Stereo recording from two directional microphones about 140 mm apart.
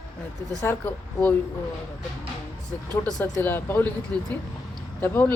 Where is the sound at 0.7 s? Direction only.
15° left (ahead or behind).